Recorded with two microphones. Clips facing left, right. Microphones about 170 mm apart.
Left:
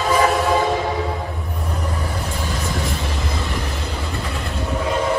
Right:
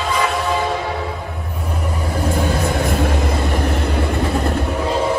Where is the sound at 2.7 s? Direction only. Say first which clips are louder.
Right 7 dB; 60° right (ahead or behind).